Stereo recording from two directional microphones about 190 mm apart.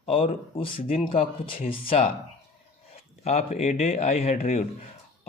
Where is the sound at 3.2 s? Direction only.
35° left (ahead or behind).